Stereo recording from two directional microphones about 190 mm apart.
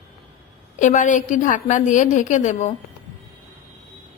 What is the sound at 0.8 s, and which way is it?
A woman's voice, 40° left (ahead or behind).